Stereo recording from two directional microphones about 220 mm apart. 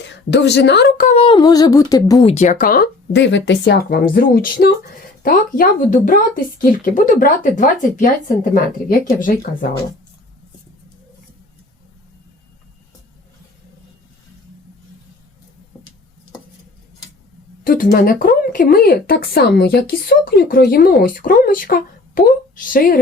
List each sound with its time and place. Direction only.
0.0 s a woman's voice: 55° left (ahead or behind); by 2.3 s 20° left (ahead or behind)
2.3 s a woman's voice: 35° left (ahead or behind)
17.6 s a woman's voice: 40° left (ahead or behind)